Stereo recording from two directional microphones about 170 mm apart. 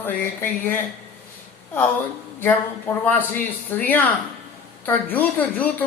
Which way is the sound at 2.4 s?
10° left (ahead or behind).